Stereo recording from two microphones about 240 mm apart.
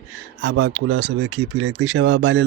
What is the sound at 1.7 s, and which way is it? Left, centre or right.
Speech, right.